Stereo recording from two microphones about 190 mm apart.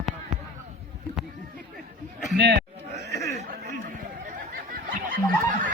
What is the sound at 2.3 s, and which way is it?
Speech, 60° right (ahead or behind).